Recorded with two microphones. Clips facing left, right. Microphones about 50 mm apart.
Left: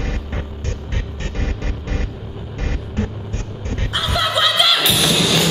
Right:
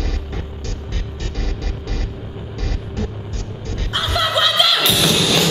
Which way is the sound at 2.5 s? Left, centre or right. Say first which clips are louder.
Left 3 dB; left.